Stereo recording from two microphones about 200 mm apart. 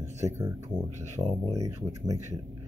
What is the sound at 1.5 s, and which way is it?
Speech, 15° right (ahead or behind).